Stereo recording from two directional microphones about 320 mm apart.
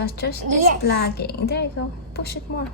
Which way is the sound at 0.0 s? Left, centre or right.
Left.